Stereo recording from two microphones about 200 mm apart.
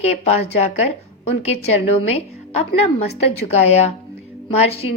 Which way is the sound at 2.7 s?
30° left (ahead or behind).